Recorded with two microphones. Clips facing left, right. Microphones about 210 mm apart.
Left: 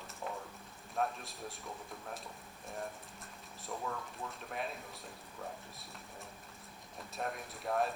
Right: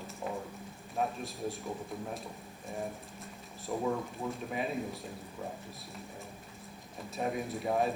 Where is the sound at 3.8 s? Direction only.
15° right (ahead or behind).